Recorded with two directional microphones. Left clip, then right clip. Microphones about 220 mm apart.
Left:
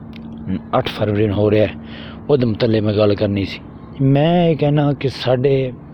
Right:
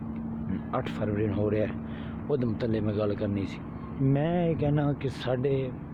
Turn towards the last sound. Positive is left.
turn(degrees=30)  # may be behind; listen again after turning